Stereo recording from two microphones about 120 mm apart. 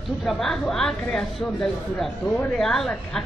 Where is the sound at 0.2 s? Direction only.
Centre (ahead or behind).